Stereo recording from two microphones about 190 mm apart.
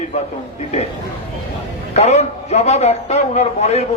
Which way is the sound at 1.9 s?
35° left (ahead or behind).